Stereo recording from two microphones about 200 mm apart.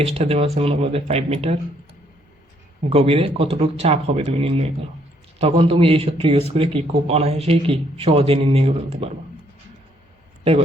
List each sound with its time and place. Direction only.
0.0 s speech: 30° right (ahead or behind)
2.9 s speech: 30° right (ahead or behind)